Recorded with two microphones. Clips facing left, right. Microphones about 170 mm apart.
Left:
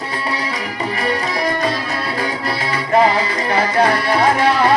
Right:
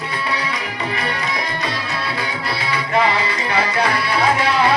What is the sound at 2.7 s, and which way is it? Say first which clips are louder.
Music: left 4 dB; 40° left (ahead or behind).